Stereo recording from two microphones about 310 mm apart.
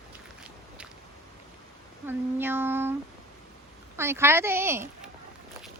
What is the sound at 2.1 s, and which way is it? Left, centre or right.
Speech, centre.